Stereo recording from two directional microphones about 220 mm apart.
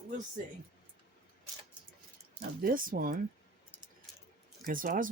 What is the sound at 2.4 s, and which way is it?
Speech, 40° right (ahead or behind).